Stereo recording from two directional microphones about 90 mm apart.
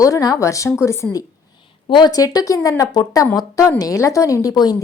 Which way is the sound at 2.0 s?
45° left (ahead or behind).